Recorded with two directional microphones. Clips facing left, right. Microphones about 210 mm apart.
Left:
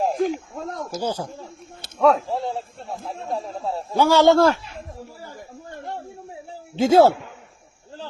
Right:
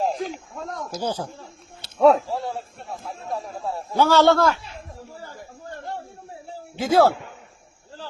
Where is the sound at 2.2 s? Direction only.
20° left (ahead or behind).